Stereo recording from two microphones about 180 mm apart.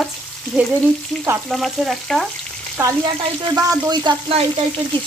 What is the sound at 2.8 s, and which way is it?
Frying, 10° right (ahead or behind).